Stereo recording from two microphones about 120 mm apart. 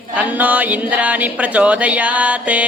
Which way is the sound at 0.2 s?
15° right (ahead or behind).